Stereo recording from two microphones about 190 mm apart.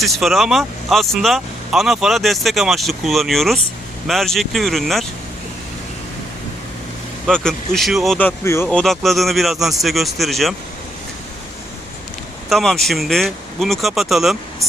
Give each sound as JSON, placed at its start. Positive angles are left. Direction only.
{"t": 0.0, "sound": "speech", "side_deg": 0}
{"t": 7.3, "sound": "speech", "side_deg": 5}
{"t": 12.5, "sound": "speech", "side_deg": 0}